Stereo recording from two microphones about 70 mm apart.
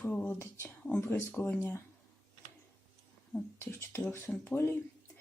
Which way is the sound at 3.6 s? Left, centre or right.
Left.